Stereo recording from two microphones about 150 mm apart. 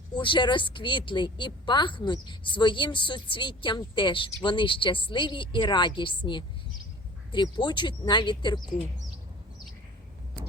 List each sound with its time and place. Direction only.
0.1 s a woman's voice: 30° left (ahead or behind)